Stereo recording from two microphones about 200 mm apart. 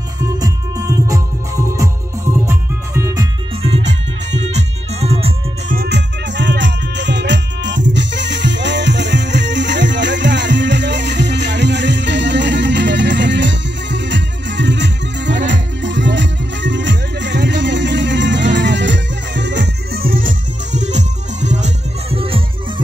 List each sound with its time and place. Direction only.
0.4 s music: 15° right (ahead or behind)
2.4 s music: 15° right (ahead or behind)
4.3 s music: 35° right (ahead or behind)
5.8 s music: 55° right (ahead or behind); by 22.4 s 30° right (ahead or behind)